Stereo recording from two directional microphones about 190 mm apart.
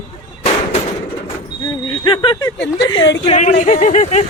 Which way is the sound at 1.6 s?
25° left (ahead or behind).